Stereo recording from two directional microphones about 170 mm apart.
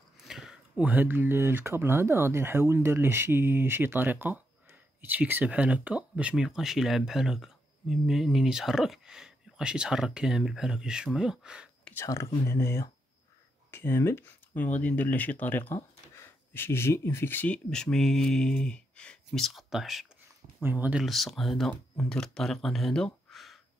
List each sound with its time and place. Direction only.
0.2 s speech: centre (ahead or behind)
11.8 s speech: 10° left (ahead or behind)